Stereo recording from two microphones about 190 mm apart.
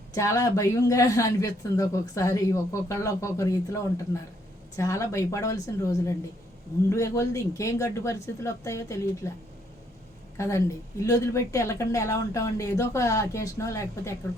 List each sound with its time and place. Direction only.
0.1 s a woman's voice: 15° left (ahead or behind)
10.3 s a woman's voice: 15° left (ahead or behind)